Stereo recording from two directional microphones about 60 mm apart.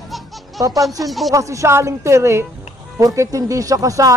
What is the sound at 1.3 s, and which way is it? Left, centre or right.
Speech, right.